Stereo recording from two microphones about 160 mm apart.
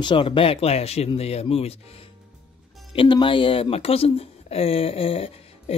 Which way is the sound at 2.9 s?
30° left (ahead or behind).